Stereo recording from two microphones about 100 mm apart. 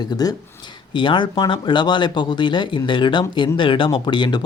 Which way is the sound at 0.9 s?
55° left (ahead or behind).